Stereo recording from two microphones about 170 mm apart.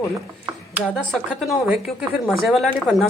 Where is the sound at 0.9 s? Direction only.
Centre (ahead or behind).